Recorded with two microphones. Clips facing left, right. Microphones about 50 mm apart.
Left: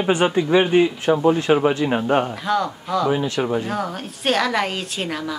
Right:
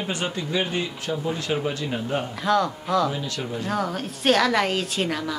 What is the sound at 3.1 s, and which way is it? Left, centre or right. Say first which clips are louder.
Speech: left 9 dB; left.